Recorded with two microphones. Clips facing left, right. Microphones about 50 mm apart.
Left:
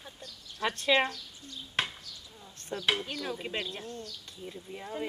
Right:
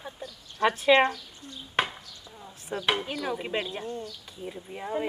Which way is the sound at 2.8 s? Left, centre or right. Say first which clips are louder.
Right 3 dB; centre.